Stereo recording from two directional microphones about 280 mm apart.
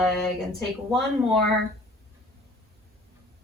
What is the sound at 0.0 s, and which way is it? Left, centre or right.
A woman's voice, centre.